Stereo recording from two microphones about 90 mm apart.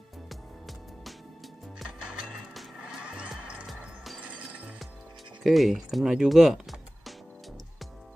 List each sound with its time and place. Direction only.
1.8 s music: centre (ahead or behind)
5.4 s speech: centre (ahead or behind)